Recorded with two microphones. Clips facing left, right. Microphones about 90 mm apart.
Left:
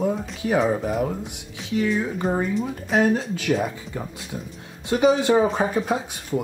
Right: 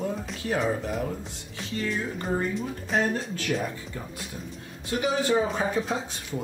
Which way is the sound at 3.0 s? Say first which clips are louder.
Left 8 dB; 15° left (ahead or behind).